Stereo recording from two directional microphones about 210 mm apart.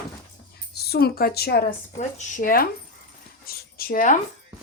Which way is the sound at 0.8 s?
50° left (ahead or behind).